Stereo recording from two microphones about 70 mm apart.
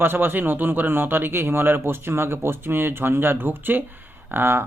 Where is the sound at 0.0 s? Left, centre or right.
Right.